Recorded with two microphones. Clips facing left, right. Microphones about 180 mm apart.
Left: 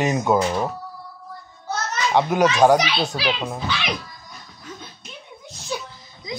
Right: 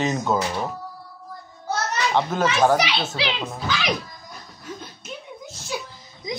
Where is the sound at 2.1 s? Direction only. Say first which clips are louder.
Left 4 dB; 15° left (ahead or behind).